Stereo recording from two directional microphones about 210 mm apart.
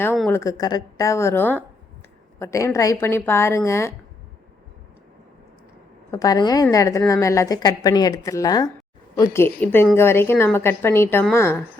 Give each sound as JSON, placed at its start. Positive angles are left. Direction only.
{"t": 0.3, "sound": "a woman's voice", "side_deg": 15}
{"t": 6.1, "sound": "a woman's voice", "side_deg": 15}